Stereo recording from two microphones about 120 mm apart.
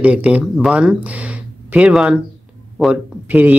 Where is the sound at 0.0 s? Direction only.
10° right (ahead or behind).